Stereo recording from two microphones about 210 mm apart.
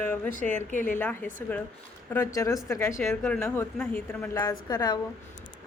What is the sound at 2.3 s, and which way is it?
Speech, 15° left (ahead or behind).